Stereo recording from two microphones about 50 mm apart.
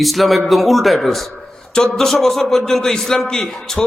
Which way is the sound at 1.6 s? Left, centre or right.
Centre.